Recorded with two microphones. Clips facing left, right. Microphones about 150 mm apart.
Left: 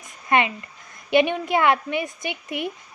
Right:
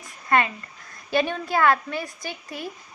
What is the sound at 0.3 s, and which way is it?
A child's voice, 20° left (ahead or behind).